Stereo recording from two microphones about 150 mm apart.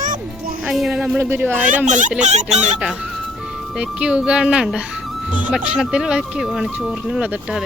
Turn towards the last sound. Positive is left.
turn(degrees=-5)  # may be behind; listen again after turning